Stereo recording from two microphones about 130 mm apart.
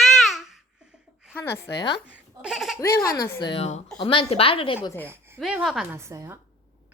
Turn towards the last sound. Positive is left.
turn(degrees=-25)  # may be behind; listen again after turning